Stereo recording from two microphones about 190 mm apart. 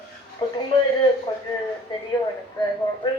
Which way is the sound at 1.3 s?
25° left (ahead or behind).